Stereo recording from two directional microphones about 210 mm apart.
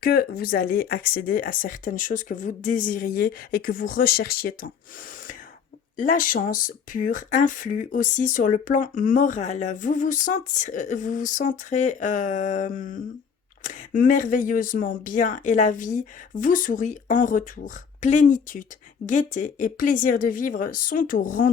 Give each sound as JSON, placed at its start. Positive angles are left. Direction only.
{"t": 0.0, "sound": "speech", "side_deg": 45}
{"t": 6.0, "sound": "speech", "side_deg": 40}